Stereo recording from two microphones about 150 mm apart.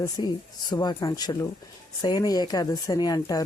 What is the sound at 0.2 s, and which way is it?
Speech, 30° left (ahead or behind).